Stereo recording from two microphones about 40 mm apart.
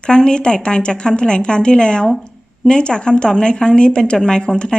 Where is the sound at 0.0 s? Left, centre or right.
Left.